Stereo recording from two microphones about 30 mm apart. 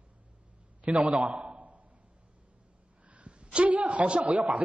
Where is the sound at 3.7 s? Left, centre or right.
Right.